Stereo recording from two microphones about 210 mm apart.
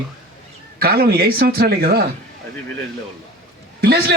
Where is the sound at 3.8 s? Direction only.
50° right (ahead or behind).